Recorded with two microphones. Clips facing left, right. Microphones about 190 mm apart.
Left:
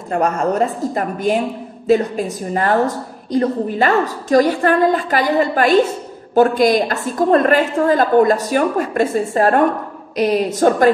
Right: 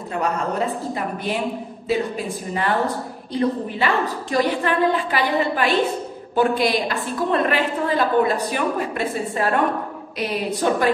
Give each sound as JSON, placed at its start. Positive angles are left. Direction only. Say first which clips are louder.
{"t": 0.1, "sound": "a woman's voice", "louder": "left 6 dB", "side_deg": 45}